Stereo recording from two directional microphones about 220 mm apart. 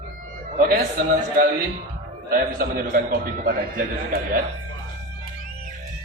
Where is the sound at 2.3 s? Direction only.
40° right (ahead or behind).